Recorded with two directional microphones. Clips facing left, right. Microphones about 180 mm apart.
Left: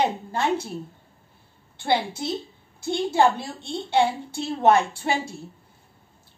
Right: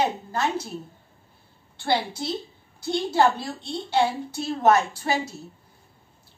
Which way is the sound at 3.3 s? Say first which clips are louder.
Even; 25° left (ahead or behind).